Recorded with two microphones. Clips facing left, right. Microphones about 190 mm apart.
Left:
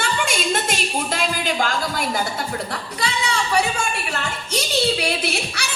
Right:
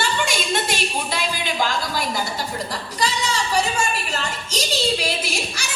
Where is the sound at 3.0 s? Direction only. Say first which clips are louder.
Right 1 dB; 60° left (ahead or behind).